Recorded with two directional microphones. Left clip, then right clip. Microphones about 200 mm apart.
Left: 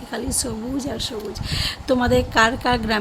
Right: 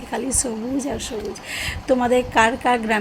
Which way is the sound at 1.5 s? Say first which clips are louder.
Right 1 dB; 15° left (ahead or behind).